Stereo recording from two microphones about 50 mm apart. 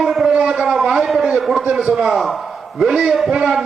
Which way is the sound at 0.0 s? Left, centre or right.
Centre.